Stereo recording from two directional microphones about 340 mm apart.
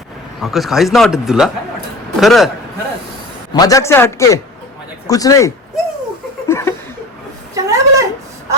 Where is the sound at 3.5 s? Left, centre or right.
Centre.